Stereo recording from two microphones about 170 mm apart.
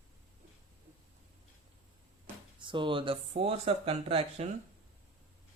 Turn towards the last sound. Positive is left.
turn(degrees=-35)  # may be behind; listen again after turning